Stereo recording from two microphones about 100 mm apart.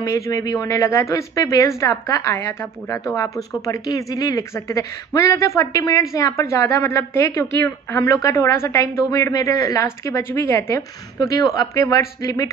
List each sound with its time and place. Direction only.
0.0 s a woman's voice: 35° left (ahead or behind)